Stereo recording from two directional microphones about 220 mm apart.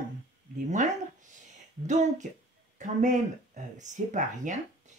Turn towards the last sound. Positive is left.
turn(degrees=-35)  # may be behind; listen again after turning